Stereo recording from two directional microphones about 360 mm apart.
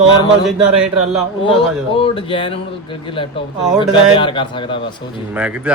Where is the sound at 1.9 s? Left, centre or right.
Centre.